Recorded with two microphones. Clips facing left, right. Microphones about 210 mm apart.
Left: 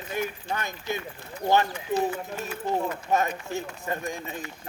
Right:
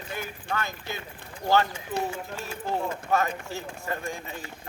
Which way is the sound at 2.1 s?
25° right (ahead or behind).